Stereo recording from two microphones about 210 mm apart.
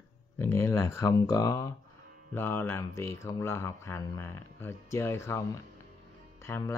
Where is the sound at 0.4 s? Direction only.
10° left (ahead or behind).